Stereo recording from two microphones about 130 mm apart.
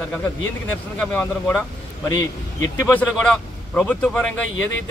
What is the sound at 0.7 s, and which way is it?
Speech, 10° left (ahead or behind).